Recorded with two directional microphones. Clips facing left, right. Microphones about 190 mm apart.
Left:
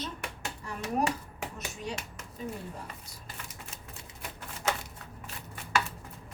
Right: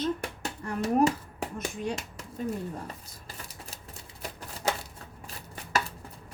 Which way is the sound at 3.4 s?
35° right (ahead or behind).